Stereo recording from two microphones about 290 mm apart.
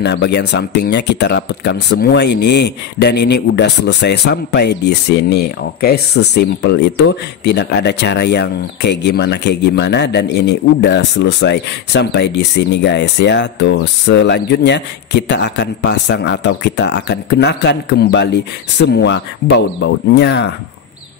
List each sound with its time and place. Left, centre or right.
0.0 s speech: left